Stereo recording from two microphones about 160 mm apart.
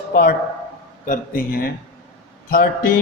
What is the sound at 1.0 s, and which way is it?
Speech, 60° left (ahead or behind).